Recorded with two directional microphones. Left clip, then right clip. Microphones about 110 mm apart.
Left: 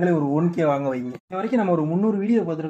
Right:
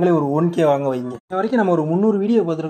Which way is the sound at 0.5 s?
20° right (ahead or behind).